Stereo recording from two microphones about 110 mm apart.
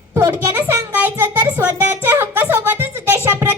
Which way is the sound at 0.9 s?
15° right (ahead or behind).